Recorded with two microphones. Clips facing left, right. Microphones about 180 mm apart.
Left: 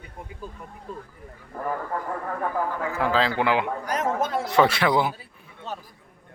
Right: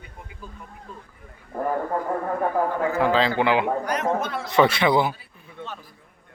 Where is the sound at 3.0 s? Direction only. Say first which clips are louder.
Right 2 dB; 5° left (ahead or behind).